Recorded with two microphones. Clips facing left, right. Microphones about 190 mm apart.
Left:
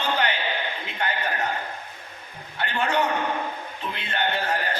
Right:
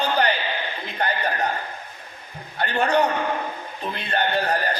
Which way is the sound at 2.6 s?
40° right (ahead or behind).